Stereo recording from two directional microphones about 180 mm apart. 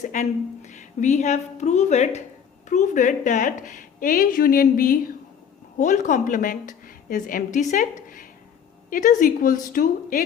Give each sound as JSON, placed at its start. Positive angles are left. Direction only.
{"t": 0.0, "sound": "a woman's voice", "side_deg": 40}